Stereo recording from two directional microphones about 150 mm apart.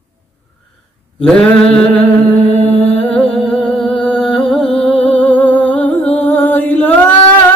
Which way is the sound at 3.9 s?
35° left (ahead or behind).